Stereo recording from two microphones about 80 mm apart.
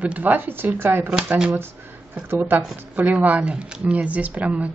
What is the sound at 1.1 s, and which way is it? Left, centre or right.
Speech, centre.